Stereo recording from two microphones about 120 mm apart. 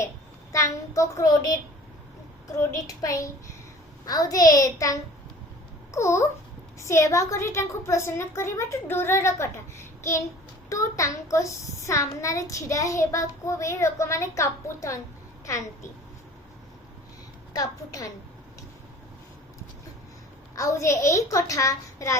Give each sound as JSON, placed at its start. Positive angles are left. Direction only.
{"t": 0.5, "sound": "a child's voice", "side_deg": 25}
{"t": 17.5, "sound": "a child's voice", "side_deg": 30}
{"t": 20.6, "sound": "a child's voice", "side_deg": 25}